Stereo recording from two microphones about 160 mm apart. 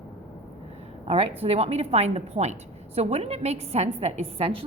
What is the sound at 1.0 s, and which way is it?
A woman's voice, 40° right (ahead or behind).